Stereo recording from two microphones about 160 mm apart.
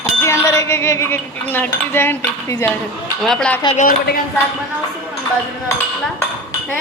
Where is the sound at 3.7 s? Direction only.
60° left (ahead or behind).